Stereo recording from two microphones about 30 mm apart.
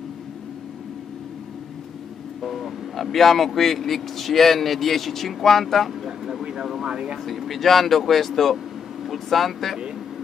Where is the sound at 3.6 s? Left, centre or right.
Centre.